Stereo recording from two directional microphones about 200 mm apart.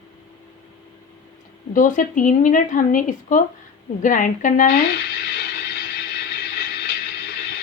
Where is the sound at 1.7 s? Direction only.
40° left (ahead or behind).